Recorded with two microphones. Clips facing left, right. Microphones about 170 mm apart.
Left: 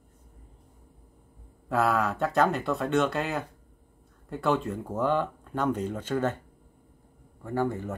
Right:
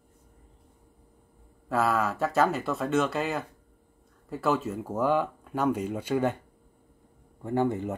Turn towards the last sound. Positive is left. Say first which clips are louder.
# right 2 dB
turn(degrees=-20)  # may be behind; listen again after turning